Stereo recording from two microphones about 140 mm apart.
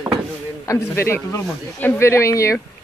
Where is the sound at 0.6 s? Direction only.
25° left (ahead or behind).